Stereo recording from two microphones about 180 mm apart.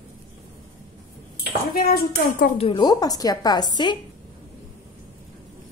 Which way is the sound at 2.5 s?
30° left (ahead or behind).